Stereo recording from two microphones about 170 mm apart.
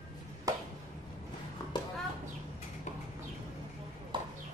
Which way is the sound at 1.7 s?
25° left (ahead or behind).